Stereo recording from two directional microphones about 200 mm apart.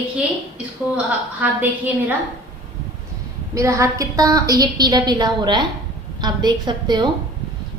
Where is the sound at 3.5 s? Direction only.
15° right (ahead or behind).